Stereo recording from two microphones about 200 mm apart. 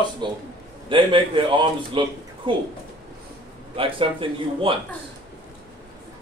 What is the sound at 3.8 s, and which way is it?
A man's voice, 25° right (ahead or behind).